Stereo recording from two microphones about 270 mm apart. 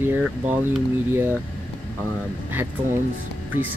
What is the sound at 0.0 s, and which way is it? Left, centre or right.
Speech, centre.